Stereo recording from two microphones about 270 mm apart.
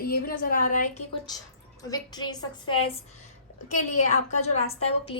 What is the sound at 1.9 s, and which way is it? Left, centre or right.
A woman's voice, centre.